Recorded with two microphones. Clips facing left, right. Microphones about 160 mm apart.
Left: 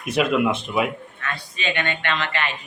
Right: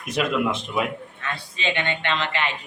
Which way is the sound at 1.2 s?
25° right (ahead or behind).